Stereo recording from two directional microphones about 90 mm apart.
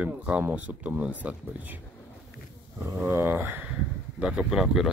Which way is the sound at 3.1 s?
25° right (ahead or behind).